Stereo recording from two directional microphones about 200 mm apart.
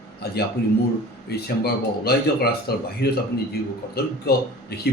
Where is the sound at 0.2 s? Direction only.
50° left (ahead or behind).